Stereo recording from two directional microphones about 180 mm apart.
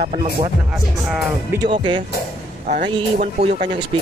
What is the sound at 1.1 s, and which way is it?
Speech, 5° right (ahead or behind).